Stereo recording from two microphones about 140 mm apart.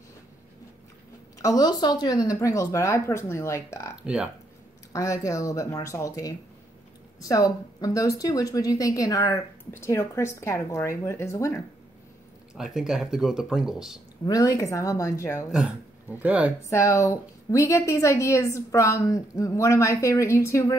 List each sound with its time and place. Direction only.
1.4 s speech: 25° left (ahead or behind)
4.0 s speech: 5° right (ahead or behind)
4.9 s speech: 25° left (ahead or behind)
12.5 s speech: 5° right (ahead or behind)
14.2 s speech: 25° left (ahead or behind)
16.1 s speech: 10° right (ahead or behind)
16.6 s speech: 20° left (ahead or behind)